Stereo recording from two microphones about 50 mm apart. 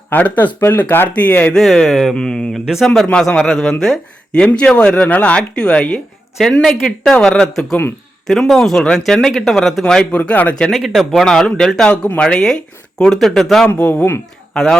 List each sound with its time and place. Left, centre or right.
0.1 s speech: left
0.7 s speech: left
1.1 s speech: left
1.5 s speech: centre
2.1 s speech: centre
4.7 s speech: centre
6.4 s speech: centre
9.3 s speech: centre
9.8 s speech: centre
10.2 s speech: left
10.7 s speech: centre
11.3 s speech: centre
13.7 s speech: left
14.5 s speech: centre